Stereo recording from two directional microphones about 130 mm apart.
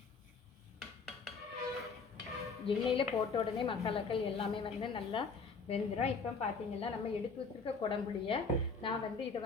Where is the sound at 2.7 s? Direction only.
40° left (ahead or behind).